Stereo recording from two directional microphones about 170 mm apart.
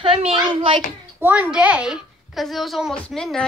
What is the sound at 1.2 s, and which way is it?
A woman's voice, 10° right (ahead or behind).